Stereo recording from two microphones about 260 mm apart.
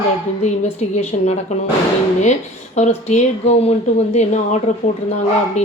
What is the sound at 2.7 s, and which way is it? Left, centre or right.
Speech, left.